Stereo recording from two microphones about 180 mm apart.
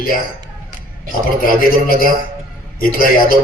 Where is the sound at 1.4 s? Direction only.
50° left (ahead or behind).